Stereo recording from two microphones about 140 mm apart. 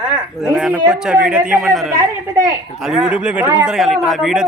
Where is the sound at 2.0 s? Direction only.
25° right (ahead or behind).